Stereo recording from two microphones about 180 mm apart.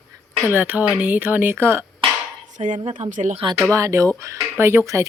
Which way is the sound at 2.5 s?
45° right (ahead or behind).